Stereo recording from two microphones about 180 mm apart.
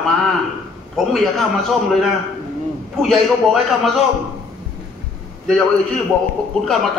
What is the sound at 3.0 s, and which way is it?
A man's voice, centre (ahead or behind).